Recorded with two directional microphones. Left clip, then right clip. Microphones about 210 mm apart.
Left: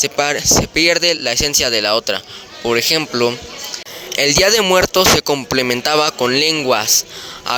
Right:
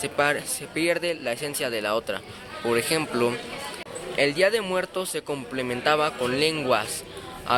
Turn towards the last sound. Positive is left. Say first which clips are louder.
# left 4 dB
turn(degrees=55)  # may be behind; listen again after turning